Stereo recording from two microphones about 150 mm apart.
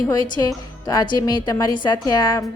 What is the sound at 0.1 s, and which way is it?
A woman's voice, 25° left (ahead or behind).